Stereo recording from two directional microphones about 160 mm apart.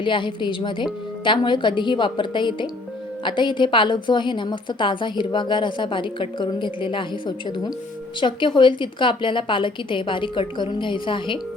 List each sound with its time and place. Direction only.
0.0 s a woman's voice: 30° left (ahead or behind)